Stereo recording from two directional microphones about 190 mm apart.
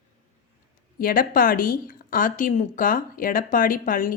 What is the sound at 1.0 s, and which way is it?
A woman's voice, 50° left (ahead or behind).